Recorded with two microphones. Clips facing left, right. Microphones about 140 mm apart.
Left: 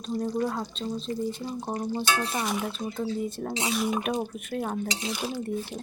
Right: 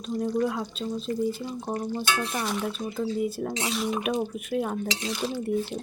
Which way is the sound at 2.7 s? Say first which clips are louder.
Right 2 dB; 5° right (ahead or behind).